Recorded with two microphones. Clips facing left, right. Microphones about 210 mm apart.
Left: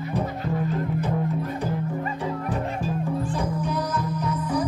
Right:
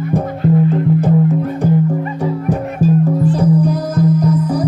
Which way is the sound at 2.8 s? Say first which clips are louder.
Right 13 dB; 40° right (ahead or behind).